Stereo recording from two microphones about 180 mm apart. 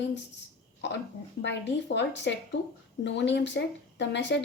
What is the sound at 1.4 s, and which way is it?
A woman's voice, 80° left.